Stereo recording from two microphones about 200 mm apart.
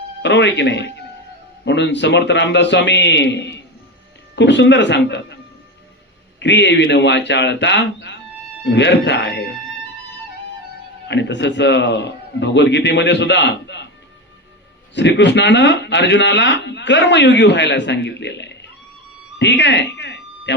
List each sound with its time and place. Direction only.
0.2 s a man's voice: 60° left (ahead or behind)
6.4 s a man's voice: 60° left (ahead or behind)
11.1 s a man's voice: 60° left (ahead or behind)
14.9 s a man's voice: 60° left (ahead or behind)
19.4 s a sound: 60° left (ahead or behind)